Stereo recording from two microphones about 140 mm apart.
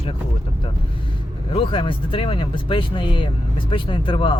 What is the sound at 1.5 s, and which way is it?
Speech, 40° left (ahead or behind).